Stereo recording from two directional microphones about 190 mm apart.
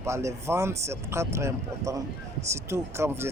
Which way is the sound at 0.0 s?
15° right (ahead or behind).